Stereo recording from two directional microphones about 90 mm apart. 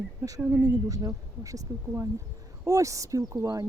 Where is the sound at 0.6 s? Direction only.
40° right (ahead or behind).